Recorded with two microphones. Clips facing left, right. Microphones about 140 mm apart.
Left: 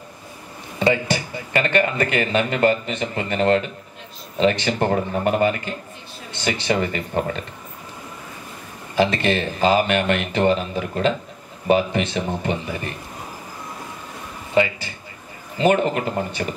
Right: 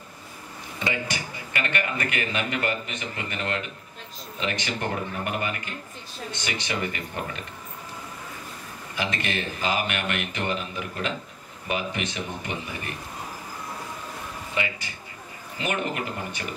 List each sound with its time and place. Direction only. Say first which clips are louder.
0.7 s a man's voice: left 10 dB; 30° left (ahead or behind)
8.9 s speech: left 10 dB; 30° left (ahead or behind)
14.5 s a sound: left 12 dB; 35° left (ahead or behind)
15.5 s speech: left 10 dB; 30° left (ahead or behind)